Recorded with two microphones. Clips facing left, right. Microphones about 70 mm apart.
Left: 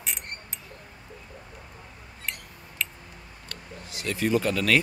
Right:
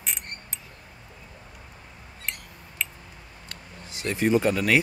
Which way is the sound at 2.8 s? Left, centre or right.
Centre.